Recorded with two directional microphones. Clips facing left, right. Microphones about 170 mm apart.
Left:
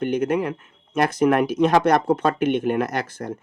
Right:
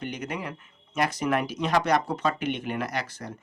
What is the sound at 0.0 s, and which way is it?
Speech, 50° left (ahead or behind).